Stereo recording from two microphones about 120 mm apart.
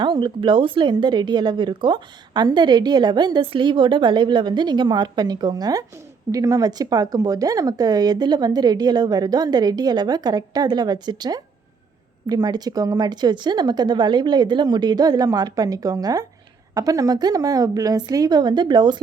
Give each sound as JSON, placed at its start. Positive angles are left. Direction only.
{"t": 0.0, "sound": "a woman's voice", "side_deg": -40}